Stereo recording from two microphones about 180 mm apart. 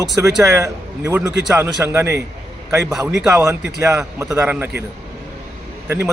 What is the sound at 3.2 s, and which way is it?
Speech, 15° right (ahead or behind).